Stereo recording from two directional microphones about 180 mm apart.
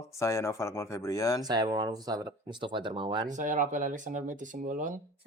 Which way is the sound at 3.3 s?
45° right (ahead or behind).